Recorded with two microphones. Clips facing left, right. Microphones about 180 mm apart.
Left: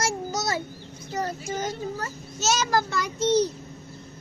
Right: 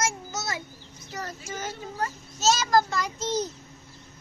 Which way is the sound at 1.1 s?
30° left (ahead or behind).